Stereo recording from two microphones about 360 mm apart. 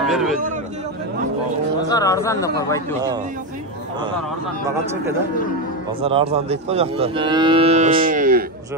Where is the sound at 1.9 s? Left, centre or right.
Centre.